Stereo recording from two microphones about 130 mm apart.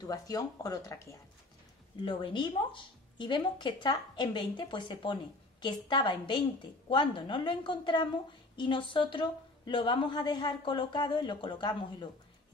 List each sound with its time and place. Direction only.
0.0 s speech: 25° left (ahead or behind)
2.0 s a woman's voice: 35° left (ahead or behind)